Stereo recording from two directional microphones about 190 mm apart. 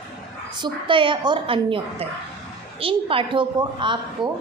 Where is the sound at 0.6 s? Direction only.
25° right (ahead or behind).